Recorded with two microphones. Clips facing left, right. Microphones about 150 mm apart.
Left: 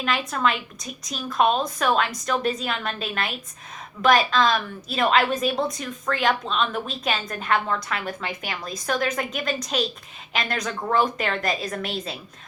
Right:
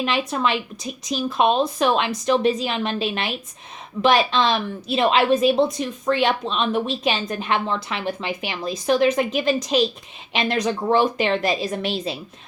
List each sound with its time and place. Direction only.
0.0 s a woman's voice: 25° right (ahead or behind)